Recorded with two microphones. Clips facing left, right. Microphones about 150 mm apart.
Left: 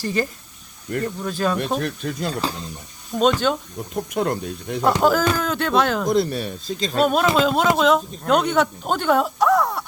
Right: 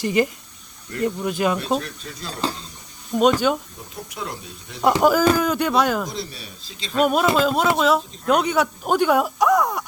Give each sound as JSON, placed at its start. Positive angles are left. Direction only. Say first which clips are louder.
{"t": 0.0, "sound": "speech", "louder": "right 3 dB", "side_deg": -15}
{"t": 1.8, "sound": "speech", "louder": "left 9 dB", "side_deg": 55}
{"t": 3.2, "sound": "speech", "louder": "right 1 dB", "side_deg": -10}
{"t": 4.1, "sound": "speech", "louder": "left 10 dB", "side_deg": 55}
{"t": 4.8, "sound": "speech", "louder": "right 1 dB", "side_deg": -10}
{"t": 6.1, "sound": "speech", "louder": "left 12 dB", "side_deg": 55}
{"t": 7.0, "sound": "speech", "louder": "even", "side_deg": -5}